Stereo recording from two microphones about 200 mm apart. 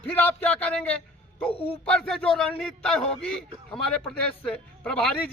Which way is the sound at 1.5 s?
30° left (ahead or behind).